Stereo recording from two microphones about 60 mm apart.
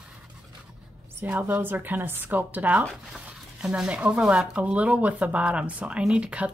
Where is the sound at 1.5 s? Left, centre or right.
Right.